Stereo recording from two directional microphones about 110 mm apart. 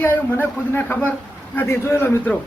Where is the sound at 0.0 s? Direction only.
20° left (ahead or behind).